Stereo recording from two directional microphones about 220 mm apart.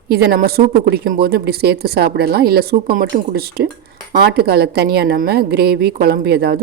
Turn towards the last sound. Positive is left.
turn(degrees=-45)  # may be behind; listen again after turning